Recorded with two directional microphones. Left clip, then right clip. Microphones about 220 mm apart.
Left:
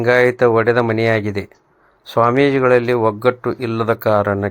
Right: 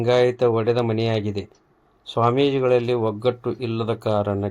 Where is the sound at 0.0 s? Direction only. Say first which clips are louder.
Left 5 dB; 20° left (ahead or behind).